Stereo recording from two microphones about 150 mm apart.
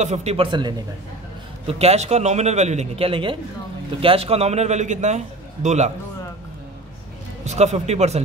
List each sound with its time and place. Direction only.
0.0 s speech: 50° right (ahead or behind); by 0.8 s 30° right (ahead or behind)
1.7 s a man's voice: 45° right (ahead or behind)
7.4 s a man's voice: 45° right (ahead or behind)